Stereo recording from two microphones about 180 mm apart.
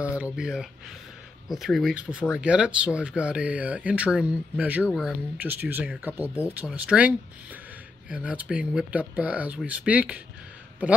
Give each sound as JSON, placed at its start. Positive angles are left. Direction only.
{"t": 0.0, "sound": "speech", "side_deg": -5}